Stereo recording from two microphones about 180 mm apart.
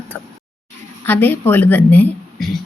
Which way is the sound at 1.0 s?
10° left (ahead or behind).